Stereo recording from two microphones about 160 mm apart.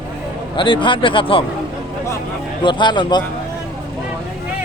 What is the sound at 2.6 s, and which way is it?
Speech, 30° left (ahead or behind).